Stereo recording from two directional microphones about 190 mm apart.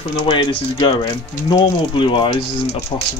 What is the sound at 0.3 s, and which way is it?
Speech, 25° left (ahead or behind).